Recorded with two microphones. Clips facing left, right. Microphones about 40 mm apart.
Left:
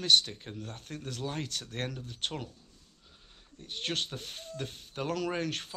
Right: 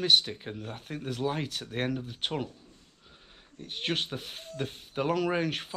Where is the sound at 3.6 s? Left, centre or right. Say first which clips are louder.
Right 3 dB; centre.